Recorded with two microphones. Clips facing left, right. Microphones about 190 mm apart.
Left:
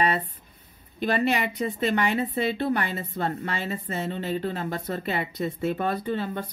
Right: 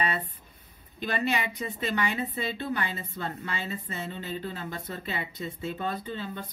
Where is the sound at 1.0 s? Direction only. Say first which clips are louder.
Left 5 dB; 55° left (ahead or behind).